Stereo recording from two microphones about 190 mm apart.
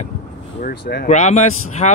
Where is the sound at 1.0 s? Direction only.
40° left (ahead or behind).